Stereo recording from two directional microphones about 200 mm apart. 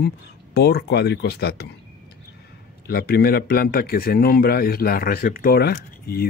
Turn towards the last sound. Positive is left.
turn(degrees=50)  # may be behind; listen again after turning